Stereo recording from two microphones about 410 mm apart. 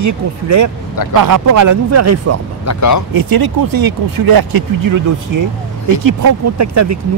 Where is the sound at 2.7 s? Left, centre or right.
Left.